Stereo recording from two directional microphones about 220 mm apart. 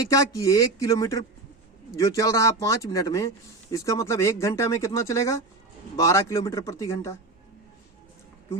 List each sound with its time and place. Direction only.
0.1 s speech: 15° left (ahead or behind)